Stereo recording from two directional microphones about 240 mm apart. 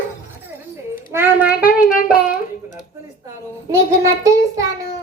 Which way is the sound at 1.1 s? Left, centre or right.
Centre.